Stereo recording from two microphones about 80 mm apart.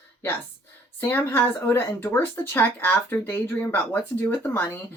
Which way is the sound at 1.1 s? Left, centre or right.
Left.